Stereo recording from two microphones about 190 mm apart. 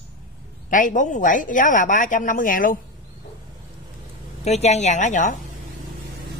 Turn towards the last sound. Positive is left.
turn(degrees=40)  # may be behind; listen again after turning